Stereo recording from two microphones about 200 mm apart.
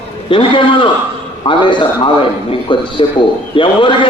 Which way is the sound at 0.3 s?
25° left (ahead or behind).